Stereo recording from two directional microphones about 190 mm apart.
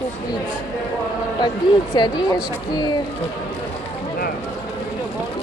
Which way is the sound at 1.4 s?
25° left (ahead or behind).